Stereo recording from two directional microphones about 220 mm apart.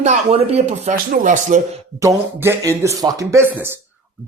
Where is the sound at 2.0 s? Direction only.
10° right (ahead or behind).